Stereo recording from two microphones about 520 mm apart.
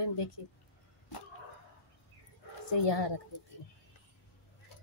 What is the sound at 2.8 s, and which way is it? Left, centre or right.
Speech, left.